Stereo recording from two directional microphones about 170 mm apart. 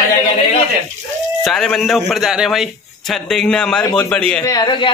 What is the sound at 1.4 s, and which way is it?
A man's voice, centre (ahead or behind).